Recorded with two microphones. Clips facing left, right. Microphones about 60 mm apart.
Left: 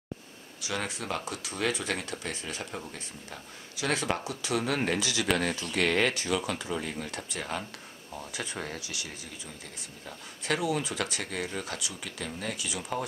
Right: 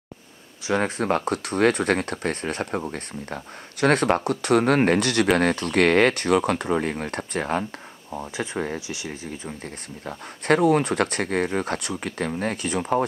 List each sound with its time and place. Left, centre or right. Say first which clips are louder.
0.7 s speech: right 11 dB; right
8.1 s speech: right 8 dB; right
10.0 s speech: right 10 dB; right